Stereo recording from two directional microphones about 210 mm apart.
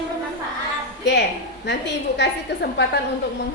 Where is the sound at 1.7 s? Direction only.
55° left (ahead or behind).